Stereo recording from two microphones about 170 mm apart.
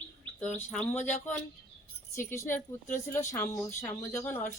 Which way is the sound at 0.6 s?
10° left (ahead or behind).